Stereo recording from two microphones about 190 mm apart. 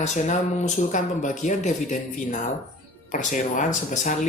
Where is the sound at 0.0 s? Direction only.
40° left (ahead or behind).